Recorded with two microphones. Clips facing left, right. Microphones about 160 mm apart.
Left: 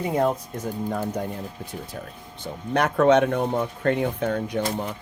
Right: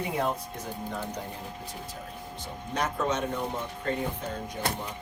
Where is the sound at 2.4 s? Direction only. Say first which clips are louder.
Left 8 dB; 65° left (ahead or behind).